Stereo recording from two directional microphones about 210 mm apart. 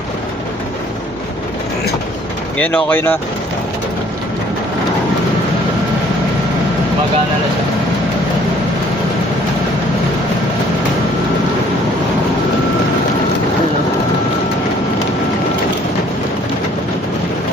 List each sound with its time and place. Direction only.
2.6 s speech: 10° left (ahead or behind)